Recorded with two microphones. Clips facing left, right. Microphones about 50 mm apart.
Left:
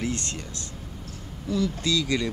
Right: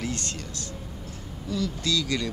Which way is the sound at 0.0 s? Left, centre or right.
Left.